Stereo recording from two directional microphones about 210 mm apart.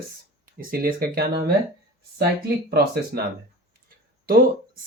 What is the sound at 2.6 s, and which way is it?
Speech, 50° right (ahead or behind).